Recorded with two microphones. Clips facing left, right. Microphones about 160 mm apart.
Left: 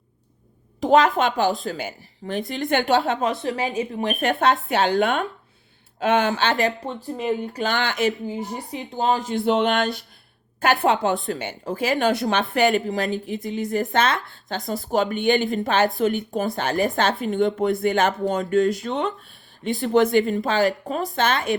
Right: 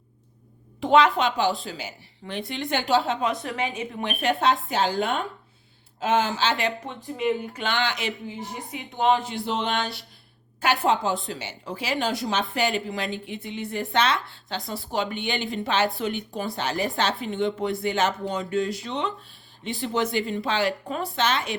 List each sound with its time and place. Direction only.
0.8 s speech: 40° left (ahead or behind)
3.1 s speech: 45° left (ahead or behind)
3.3 s a woman's voice: 30° left (ahead or behind)
4.7 s a woman's voice: 65° left (ahead or behind)
6.0 s speech: 65° left (ahead or behind)
8.5 s a woman's voice: 35° left (ahead or behind)
9.5 s a woman's voice: 65° left (ahead or behind)
11.3 s speech: 50° left (ahead or behind)
12.2 s a woman's voice: 60° left (ahead or behind)
12.9 s a woman's voice: 40° left (ahead or behind)